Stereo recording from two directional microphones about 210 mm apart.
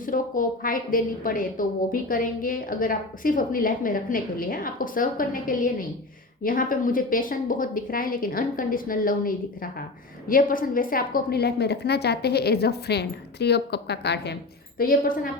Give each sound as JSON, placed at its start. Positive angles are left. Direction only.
{"t": 0.0, "sound": "a woman's voice", "side_deg": 40}
{"t": 14.8, "sound": "a woman's voice", "side_deg": 40}